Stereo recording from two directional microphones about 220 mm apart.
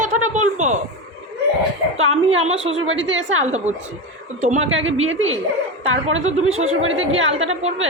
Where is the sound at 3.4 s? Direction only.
30° right (ahead or behind).